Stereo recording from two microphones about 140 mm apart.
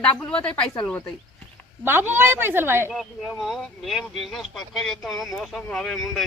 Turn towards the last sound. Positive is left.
turn(degrees=0)  # may be behind; listen again after turning